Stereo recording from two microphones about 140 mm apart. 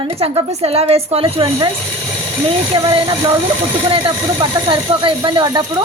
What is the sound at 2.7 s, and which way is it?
Speech, 35° right (ahead or behind).